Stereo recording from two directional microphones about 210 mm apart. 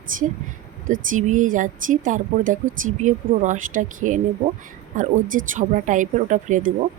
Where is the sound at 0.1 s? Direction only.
40° right (ahead or behind).